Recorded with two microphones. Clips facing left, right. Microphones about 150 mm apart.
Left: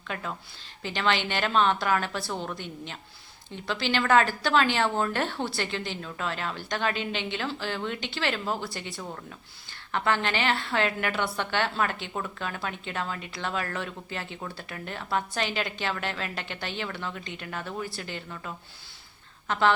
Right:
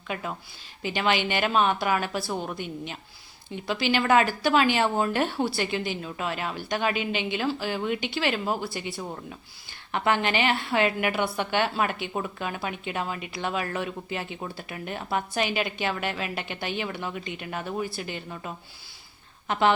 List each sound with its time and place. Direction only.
0.1 s a woman's voice: 15° right (ahead or behind)